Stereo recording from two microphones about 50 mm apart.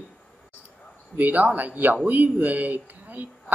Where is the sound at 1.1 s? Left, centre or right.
Right.